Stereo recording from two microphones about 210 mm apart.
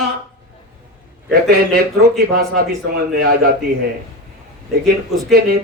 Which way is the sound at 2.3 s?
50° right (ahead or behind).